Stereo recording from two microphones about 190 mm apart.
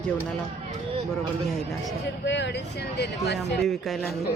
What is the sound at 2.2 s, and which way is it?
Speech, 65° left (ahead or behind).